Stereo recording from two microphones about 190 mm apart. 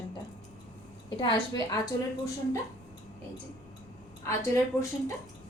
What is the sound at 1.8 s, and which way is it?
Speech, 15° left (ahead or behind).